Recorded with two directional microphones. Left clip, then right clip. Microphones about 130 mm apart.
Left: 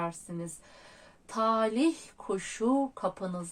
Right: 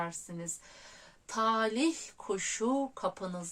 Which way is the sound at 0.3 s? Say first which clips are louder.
Left 2 dB; 25° right (ahead or behind).